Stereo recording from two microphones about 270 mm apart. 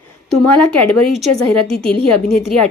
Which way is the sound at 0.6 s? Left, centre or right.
Centre.